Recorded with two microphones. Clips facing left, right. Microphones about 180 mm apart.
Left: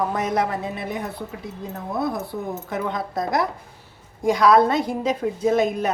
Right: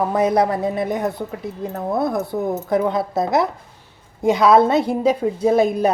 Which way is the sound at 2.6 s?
35° right (ahead or behind).